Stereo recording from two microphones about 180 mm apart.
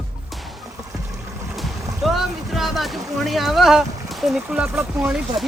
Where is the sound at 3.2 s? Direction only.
Centre (ahead or behind).